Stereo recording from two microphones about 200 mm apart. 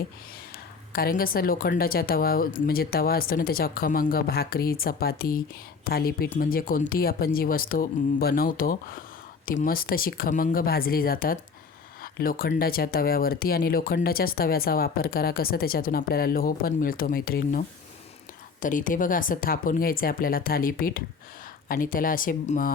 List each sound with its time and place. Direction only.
0.5 s speech: 50° left (ahead or behind)